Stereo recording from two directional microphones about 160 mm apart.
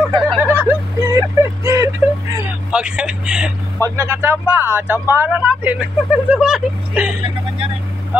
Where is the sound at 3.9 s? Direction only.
15° right (ahead or behind).